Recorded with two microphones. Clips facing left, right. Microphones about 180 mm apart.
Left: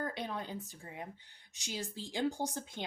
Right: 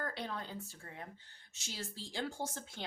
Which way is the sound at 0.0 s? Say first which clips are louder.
Left 3 dB; 15° left (ahead or behind).